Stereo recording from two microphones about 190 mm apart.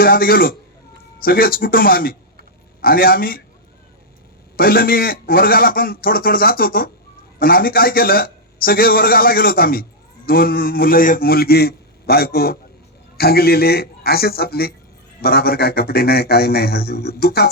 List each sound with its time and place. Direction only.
0.0 s a man's voice: 50° left (ahead or behind)
4.5 s a man's voice: 50° left (ahead or behind)